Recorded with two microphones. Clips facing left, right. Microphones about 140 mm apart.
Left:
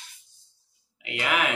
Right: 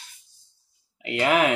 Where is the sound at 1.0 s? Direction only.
35° right (ahead or behind).